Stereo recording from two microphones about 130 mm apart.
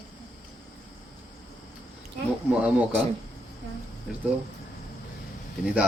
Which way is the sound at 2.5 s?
10° right (ahead or behind).